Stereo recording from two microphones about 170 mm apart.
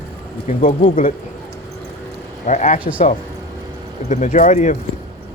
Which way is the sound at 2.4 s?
45° left (ahead or behind).